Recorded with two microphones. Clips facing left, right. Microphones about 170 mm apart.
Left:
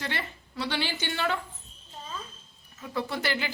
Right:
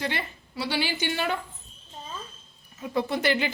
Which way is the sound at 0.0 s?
15° right (ahead or behind).